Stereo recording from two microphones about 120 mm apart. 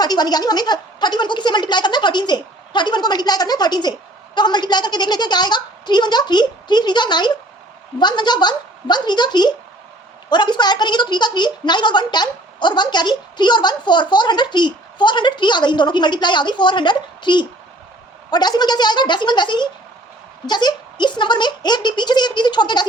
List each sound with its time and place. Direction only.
0.0 s a woman's voice: 35° left (ahead or behind)